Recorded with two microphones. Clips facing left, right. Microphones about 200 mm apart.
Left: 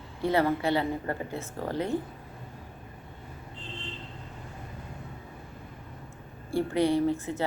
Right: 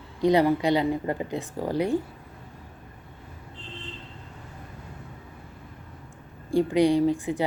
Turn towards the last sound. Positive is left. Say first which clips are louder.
# right 4 dB
turn(degrees=-15)  # may be behind; listen again after turning